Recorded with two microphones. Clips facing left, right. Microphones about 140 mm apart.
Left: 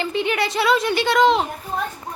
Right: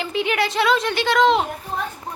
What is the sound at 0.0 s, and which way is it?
Speech, centre (ahead or behind).